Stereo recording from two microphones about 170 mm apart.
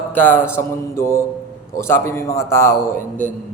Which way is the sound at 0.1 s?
10° left (ahead or behind).